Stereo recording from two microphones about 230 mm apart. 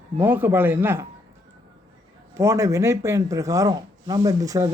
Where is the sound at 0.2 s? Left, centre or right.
Centre.